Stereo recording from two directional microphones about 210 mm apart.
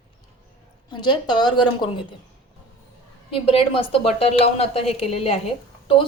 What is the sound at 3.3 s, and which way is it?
A woman's voice, 25° left (ahead or behind).